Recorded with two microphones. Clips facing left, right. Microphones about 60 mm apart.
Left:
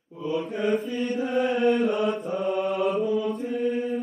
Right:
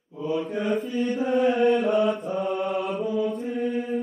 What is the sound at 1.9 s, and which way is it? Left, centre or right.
Mantra, right.